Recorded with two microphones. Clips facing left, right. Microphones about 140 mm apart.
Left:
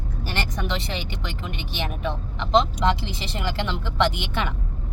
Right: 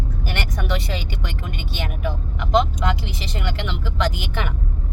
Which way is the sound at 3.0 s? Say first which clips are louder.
Even; 30° left (ahead or behind).